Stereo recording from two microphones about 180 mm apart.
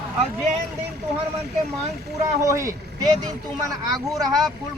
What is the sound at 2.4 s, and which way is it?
Speech, 15° right (ahead or behind).